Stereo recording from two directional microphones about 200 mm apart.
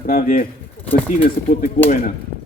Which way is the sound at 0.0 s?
40° left (ahead or behind).